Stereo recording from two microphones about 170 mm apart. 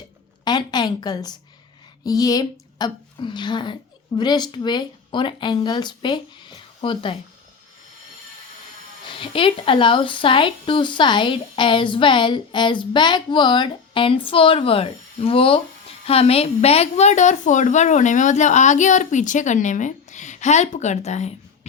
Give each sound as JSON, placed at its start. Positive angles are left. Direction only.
{"t": 0.4, "sound": "speech", "side_deg": 25}
{"t": 9.0, "sound": "a woman's voice", "side_deg": 30}